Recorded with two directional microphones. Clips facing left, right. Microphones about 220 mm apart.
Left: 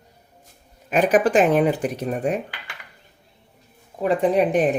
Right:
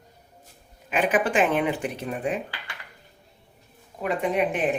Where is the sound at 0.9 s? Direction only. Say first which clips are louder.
Left 6 dB; 40° left (ahead or behind).